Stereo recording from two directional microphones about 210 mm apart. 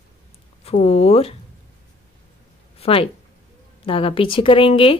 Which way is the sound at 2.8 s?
25° left (ahead or behind).